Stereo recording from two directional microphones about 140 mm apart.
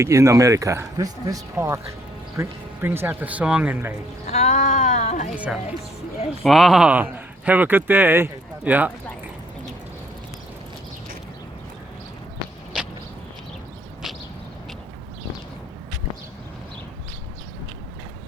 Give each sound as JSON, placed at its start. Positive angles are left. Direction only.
{"t": 0.0, "sound": "a man's voice", "side_deg": -20}
{"t": 4.3, "sound": "speech", "side_deg": 50}
{"t": 5.3, "sound": "speech", "side_deg": -5}